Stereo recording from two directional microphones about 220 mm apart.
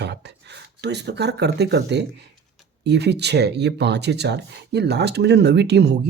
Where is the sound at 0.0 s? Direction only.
50° right (ahead or behind).